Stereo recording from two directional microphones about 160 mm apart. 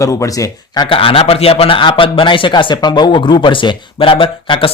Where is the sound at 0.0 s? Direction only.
20° left (ahead or behind).